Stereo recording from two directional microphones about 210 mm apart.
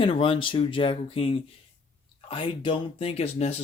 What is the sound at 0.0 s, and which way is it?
Speech, 25° left (ahead or behind).